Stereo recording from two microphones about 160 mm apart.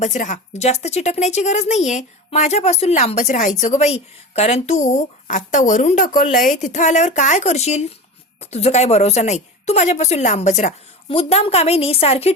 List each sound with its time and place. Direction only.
0.0 s speech: 50° left (ahead or behind)
11.1 s a woman's voice: 35° left (ahead or behind)